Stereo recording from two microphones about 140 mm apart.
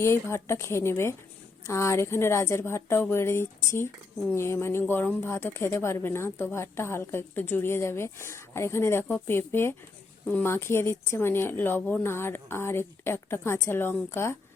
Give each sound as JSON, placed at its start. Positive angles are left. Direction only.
{"t": 0.0, "sound": "a woman's voice", "side_deg": 20}